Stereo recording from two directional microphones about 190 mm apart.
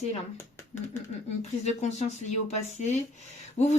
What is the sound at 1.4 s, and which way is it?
Speech, 35° left (ahead or behind).